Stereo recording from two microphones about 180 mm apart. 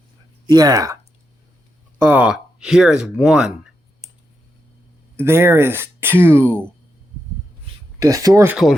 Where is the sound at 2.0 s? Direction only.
10° right (ahead or behind).